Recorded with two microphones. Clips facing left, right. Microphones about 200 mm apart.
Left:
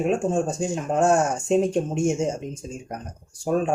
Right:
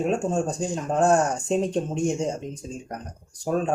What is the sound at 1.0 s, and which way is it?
Speech, 35° right (ahead or behind).